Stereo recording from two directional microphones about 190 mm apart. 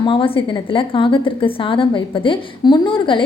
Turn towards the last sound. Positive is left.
turn(degrees=25)  # may be behind; listen again after turning